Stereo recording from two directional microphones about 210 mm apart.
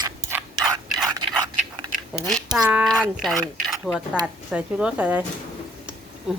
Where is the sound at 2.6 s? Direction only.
5° right (ahead or behind).